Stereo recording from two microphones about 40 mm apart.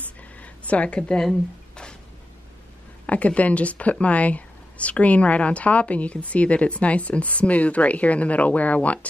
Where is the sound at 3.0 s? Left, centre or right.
Left.